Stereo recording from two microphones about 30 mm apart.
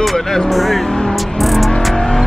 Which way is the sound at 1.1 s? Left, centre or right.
Centre.